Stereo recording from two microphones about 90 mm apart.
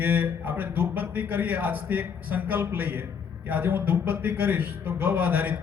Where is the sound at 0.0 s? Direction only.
20° right (ahead or behind).